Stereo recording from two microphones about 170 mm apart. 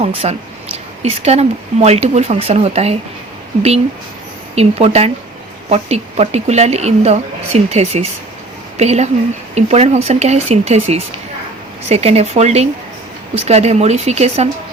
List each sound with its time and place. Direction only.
0.0 s speech: 40° right (ahead or behind)
4.5 s speech: 35° right (ahead or behind)